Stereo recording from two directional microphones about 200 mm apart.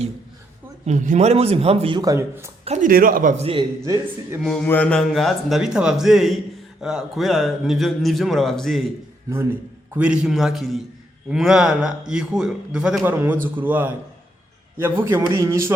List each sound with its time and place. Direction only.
0.9 s a man's voice: 35° right (ahead or behind); by 2.5 s 15° right (ahead or behind)
2.6 s a man's voice: 40° right (ahead or behind); by 4.4 s 15° right (ahead or behind)
4.4 s a man's voice: 5° left (ahead or behind)
9.3 s a man's voice: 10° right (ahead or behind)